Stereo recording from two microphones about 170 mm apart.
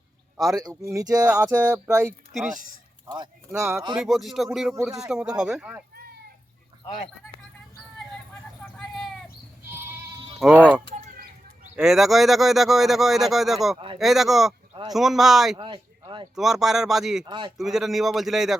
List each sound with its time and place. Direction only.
0.5 s speech: 20° right (ahead or behind)
1.3 s speech: 10° right (ahead or behind)
2.3 s speech: centre (ahead or behind)
3.1 s speech: 20° right (ahead or behind)
3.9 s speech: centre (ahead or behind)
8.8 s a sound: centre (ahead or behind)
9.6 s sheep: 15° right (ahead or behind)
10.4 s speech: centre (ahead or behind)
11.8 s speech: centre (ahead or behind)
15.5 s speech: 30° right (ahead or behind)
16.3 s speech: centre (ahead or behind)
17.2 s speech: 30° right (ahead or behind)
17.6 s speech: centre (ahead or behind)